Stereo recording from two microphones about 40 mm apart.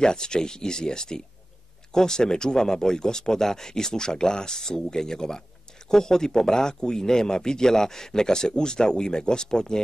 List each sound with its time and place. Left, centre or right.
0.0 s speech: centre